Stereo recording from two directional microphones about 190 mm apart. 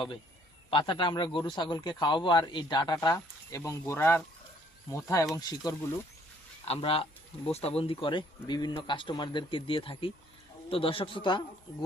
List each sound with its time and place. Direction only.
0.7 s a man's voice: 25° left (ahead or behind)